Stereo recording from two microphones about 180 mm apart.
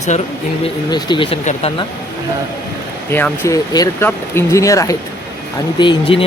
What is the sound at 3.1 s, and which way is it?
Speech, 10° left (ahead or behind).